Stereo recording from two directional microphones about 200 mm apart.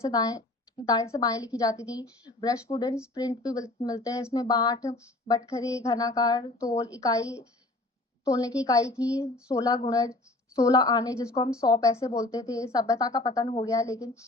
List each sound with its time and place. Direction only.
0.0 s a woman's voice: 20° left (ahead or behind)
13.7 s a woman's voice: 15° left (ahead or behind)